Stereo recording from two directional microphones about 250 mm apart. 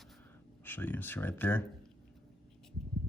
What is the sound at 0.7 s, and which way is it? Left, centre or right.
Speech, centre.